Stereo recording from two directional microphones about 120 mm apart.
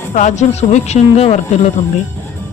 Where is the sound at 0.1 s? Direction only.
85° left; by 1.4 s 65° left (ahead or behind).